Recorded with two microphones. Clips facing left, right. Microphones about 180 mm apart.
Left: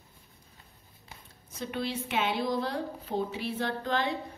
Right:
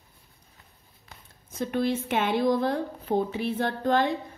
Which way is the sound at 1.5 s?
50° right (ahead or behind).